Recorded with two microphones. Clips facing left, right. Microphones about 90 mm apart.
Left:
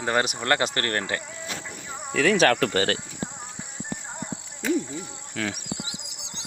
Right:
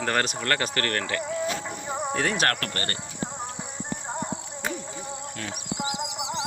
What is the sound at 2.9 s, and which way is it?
Speech, 90° left.